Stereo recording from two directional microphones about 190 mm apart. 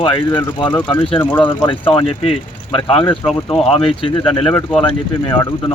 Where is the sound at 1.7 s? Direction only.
25° left (ahead or behind).